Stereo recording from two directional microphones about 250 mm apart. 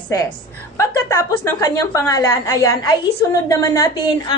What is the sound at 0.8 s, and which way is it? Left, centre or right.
A woman's voice, centre.